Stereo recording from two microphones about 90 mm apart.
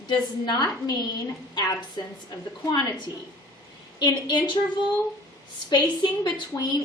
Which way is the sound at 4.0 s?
55° left (ahead or behind).